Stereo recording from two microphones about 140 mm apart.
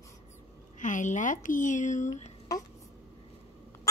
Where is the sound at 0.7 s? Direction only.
65° left (ahead or behind).